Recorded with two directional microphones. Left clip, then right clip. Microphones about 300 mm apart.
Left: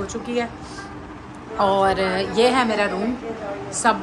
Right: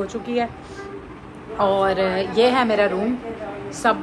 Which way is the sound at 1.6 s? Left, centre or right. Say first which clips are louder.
Even; centre.